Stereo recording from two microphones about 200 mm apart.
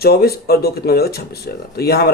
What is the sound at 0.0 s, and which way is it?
Speech, 50° left (ahead or behind).